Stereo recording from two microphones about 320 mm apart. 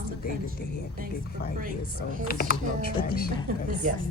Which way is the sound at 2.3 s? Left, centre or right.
Left.